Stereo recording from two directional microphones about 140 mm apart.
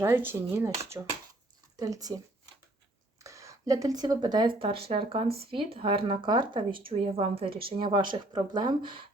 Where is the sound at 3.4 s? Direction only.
25° right (ahead or behind).